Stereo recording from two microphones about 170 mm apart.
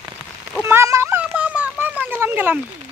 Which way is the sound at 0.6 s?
15° right (ahead or behind).